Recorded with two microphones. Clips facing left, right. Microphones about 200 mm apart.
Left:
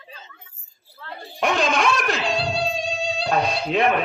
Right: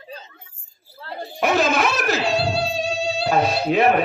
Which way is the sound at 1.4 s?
5° right (ahead or behind).